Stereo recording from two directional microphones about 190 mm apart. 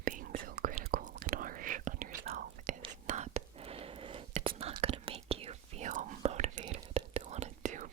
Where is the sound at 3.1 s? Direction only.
35° right (ahead or behind).